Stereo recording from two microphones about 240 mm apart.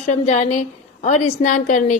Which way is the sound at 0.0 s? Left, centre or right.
Left.